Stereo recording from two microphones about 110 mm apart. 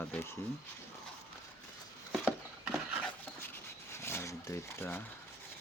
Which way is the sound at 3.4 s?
25° left (ahead or behind).